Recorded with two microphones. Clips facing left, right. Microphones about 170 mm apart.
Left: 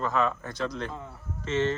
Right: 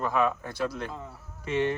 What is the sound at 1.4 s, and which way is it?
Speech, 15° right (ahead or behind).